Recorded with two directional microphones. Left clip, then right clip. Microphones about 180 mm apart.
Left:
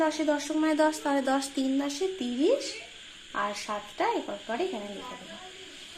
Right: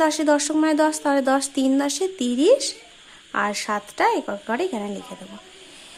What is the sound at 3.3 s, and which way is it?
Speech, 50° right (ahead or behind).